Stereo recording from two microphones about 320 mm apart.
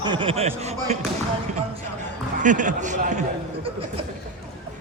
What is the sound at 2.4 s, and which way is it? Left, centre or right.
Speech, right.